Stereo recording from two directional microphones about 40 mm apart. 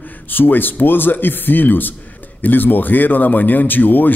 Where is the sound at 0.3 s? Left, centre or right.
Left.